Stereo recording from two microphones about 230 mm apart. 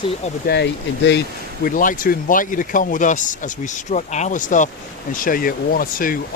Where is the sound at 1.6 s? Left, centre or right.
Left.